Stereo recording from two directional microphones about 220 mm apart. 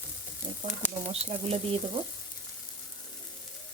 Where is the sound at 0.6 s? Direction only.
35° right (ahead or behind).